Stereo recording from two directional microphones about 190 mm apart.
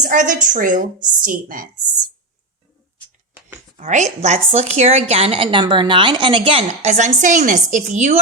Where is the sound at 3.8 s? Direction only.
40° right (ahead or behind).